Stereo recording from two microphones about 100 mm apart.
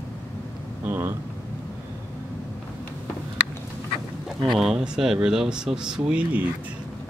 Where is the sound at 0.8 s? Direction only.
20° right (ahead or behind).